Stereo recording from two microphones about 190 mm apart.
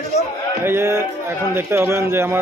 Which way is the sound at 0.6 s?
10° right (ahead or behind).